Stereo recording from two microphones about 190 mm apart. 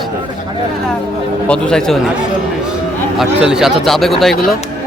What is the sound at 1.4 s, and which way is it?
Speech, 5° left (ahead or behind).